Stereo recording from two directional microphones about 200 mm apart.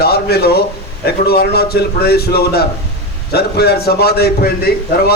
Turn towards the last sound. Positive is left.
turn(degrees=50)  # may be behind; listen again after turning